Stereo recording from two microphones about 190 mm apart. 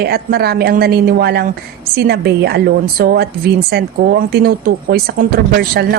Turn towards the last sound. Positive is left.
turn(degrees=-55)  # may be behind; listen again after turning